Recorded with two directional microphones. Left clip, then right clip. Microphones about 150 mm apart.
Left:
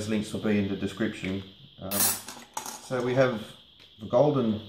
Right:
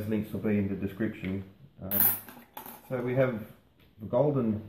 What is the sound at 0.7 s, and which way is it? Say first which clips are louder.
Speech: left 3 dB; 5° right (ahead or behind).